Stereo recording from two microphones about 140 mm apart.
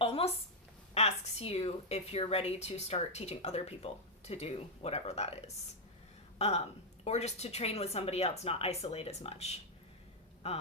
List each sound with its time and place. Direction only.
0.0 s a sound: 45° left (ahead or behind)
0.9 s speech: 50° left (ahead or behind)
6.4 s speech: 50° left (ahead or behind)